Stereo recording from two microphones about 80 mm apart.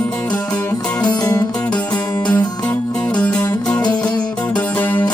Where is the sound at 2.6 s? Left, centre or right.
Centre.